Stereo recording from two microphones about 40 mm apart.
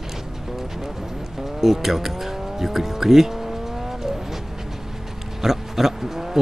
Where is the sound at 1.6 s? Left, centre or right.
Centre.